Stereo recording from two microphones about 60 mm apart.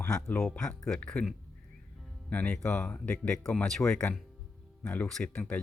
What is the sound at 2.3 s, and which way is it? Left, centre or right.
Speech, left.